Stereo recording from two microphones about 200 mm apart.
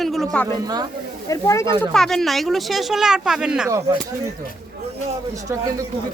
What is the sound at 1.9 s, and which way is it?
Speech, centre (ahead or behind).